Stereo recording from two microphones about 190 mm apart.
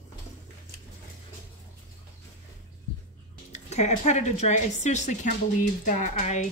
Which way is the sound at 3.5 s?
35° left (ahead or behind).